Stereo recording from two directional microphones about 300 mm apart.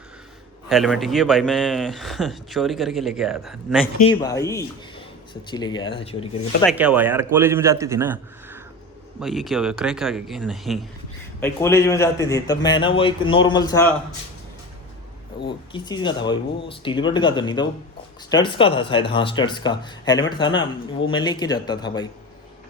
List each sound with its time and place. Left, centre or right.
0.7 s speech: centre
3.9 s speech: centre
6.6 s a man's voice: centre
15.4 s speech: centre